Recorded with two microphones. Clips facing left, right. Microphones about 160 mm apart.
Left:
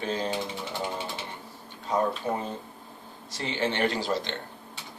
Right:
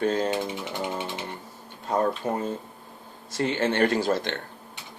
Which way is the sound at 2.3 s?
45° right (ahead or behind).